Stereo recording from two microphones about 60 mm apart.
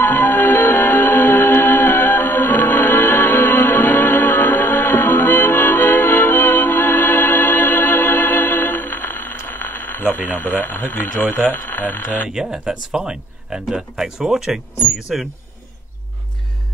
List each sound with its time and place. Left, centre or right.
0.0 s music: left
12.3 s speech: centre